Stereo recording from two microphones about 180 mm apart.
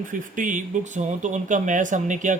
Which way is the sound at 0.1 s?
45° right (ahead or behind).